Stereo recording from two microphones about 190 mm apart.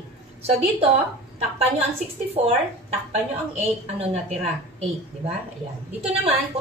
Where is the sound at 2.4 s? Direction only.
35° right (ahead or behind).